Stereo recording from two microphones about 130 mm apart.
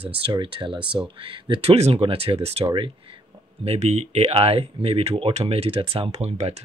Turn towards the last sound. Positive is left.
turn(degrees=-55)  # may be behind; listen again after turning